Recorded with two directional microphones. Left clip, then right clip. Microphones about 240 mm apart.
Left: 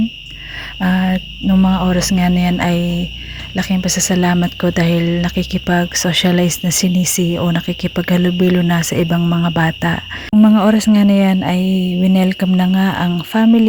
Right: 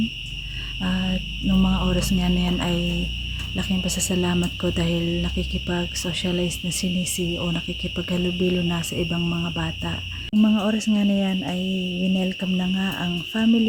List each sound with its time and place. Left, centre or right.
0.8 s speech: left